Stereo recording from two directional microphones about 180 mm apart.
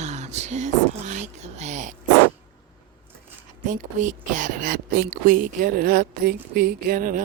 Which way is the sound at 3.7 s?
45° right (ahead or behind).